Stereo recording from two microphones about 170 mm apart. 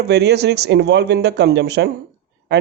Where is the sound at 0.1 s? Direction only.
80° right.